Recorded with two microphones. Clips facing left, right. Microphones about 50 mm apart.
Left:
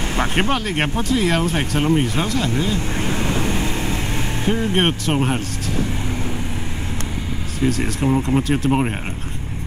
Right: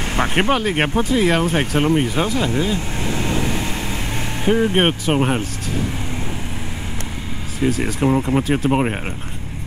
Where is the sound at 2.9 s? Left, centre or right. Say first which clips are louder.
Even; left.